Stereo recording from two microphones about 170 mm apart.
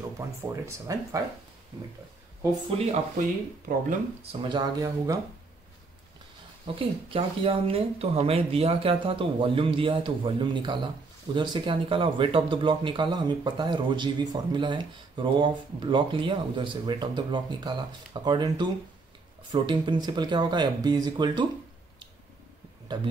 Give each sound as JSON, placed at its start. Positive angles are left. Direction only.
{"t": 0.5, "sound": "speech", "side_deg": -20}
{"t": 2.9, "sound": "speech", "side_deg": -50}
{"t": 4.2, "sound": "speech", "side_deg": -35}
{"t": 6.7, "sound": "speech", "side_deg": -30}